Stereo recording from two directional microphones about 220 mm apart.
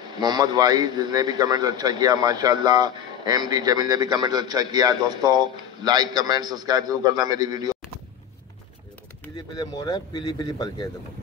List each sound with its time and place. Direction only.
0.0 s a man's voice: 20° right (ahead or behind)
9.6 s speech: 20° left (ahead or behind)